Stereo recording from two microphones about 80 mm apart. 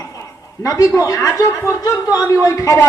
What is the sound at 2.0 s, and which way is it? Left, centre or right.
Speech, left.